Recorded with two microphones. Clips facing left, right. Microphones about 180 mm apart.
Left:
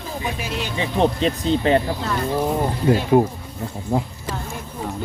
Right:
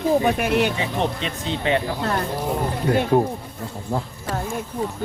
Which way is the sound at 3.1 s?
10° left (ahead or behind).